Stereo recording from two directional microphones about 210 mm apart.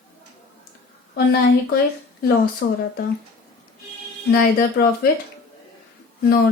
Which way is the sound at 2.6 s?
50° left (ahead or behind).